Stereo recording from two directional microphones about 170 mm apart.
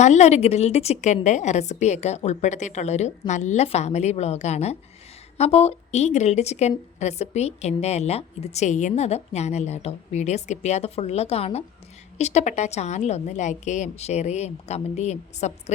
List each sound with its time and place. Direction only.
0.0 s a woman's voice: 40° left (ahead or behind)